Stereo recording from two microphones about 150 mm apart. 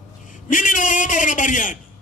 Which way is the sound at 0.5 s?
60° left (ahead or behind).